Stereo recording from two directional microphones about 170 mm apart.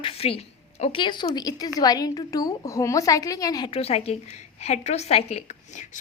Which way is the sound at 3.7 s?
35° left (ahead or behind).